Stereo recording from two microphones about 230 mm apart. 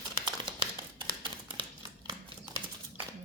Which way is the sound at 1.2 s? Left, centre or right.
Right.